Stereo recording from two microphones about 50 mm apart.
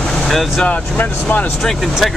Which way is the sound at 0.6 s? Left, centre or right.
Left.